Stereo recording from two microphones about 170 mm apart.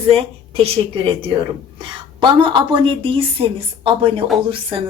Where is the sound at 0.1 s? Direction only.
35° right (ahead or behind).